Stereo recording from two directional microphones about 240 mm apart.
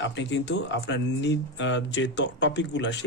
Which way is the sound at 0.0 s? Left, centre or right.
Left.